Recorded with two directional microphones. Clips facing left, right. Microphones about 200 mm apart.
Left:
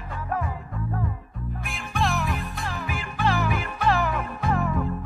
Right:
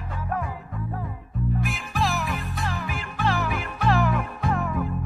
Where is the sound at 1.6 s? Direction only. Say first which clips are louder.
Left 3 dB; centre (ahead or behind).